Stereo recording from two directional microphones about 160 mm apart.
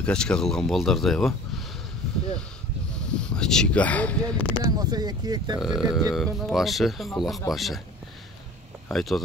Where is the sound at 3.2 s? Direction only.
5° left (ahead or behind).